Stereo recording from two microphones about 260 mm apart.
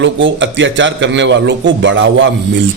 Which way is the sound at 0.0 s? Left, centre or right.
Right.